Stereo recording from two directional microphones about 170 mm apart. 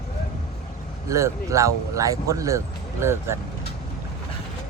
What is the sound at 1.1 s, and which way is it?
Speech, 15° right (ahead or behind).